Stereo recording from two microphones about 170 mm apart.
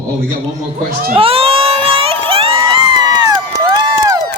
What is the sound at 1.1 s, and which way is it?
Crowd, 35° right (ahead or behind).